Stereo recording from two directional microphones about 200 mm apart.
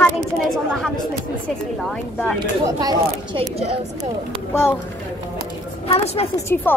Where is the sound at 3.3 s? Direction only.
30° right (ahead or behind).